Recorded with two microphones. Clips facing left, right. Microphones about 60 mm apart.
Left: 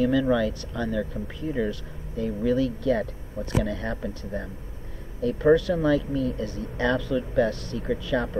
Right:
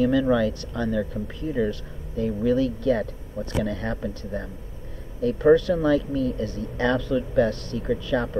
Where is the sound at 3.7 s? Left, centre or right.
Left.